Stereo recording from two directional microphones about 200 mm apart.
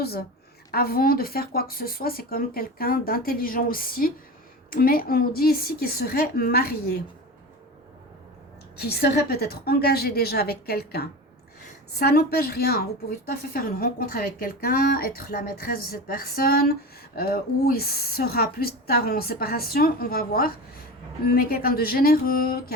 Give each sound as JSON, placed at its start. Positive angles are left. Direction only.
{"t": 0.0, "sound": "a woman's voice", "side_deg": 50}
{"t": 8.7, "sound": "a woman's voice", "side_deg": 50}